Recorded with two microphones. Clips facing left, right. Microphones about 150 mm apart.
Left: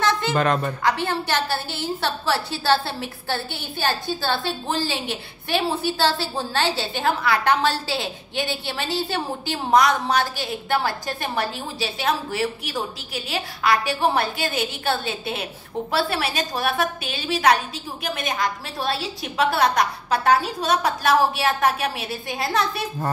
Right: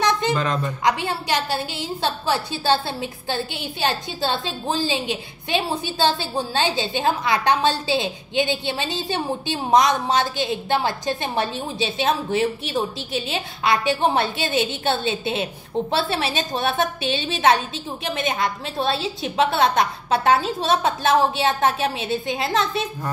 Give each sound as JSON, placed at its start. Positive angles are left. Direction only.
{"t": 0.0, "sound": "a sound", "side_deg": -20}
{"t": 0.3, "sound": "speech", "side_deg": 55}
{"t": 0.8, "sound": "a woman's voice", "side_deg": -15}